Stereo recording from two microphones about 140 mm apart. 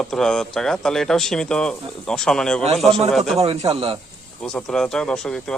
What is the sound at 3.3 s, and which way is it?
Speech, 45° right (ahead or behind).